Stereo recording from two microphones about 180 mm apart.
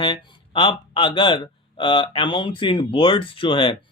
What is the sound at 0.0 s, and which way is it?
Speech, 25° left (ahead or behind).